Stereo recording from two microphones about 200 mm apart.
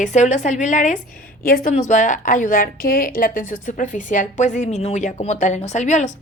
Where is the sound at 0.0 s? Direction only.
35° left (ahead or behind).